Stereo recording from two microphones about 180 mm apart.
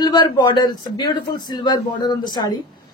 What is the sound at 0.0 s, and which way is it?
A man's voice, 25° left (ahead or behind).